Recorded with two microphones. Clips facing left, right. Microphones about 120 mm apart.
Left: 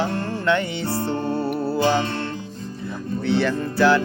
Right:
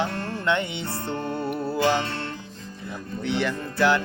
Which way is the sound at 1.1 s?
30° left (ahead or behind).